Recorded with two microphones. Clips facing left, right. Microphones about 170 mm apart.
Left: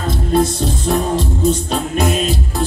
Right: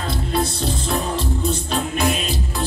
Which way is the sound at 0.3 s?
45° left (ahead or behind).